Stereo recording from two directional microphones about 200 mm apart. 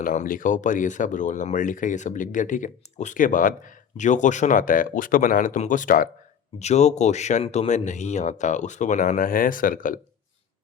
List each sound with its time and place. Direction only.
0.0 s speech: 40° left (ahead or behind)